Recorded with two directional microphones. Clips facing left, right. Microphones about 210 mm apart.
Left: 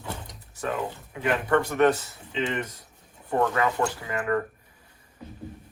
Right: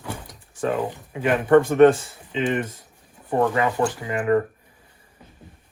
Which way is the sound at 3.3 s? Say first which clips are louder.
Right 3 dB; 20° right (ahead or behind).